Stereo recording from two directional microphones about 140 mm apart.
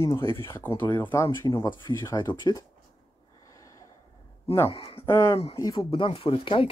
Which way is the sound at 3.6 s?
25° left (ahead or behind).